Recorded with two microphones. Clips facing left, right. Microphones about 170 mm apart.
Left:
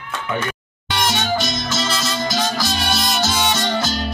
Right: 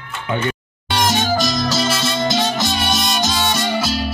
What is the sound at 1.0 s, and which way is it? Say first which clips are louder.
Music: right 3 dB; 40° right (ahead or behind).